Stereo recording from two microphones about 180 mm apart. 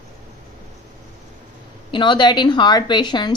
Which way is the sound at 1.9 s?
25° left (ahead or behind).